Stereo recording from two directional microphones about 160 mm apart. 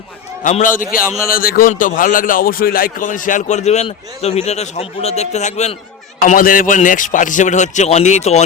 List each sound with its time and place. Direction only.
0.4 s a man's voice: 50° left (ahead or behind)
6.2 s speech: 60° left (ahead or behind); by 8.4 s 45° left (ahead or behind)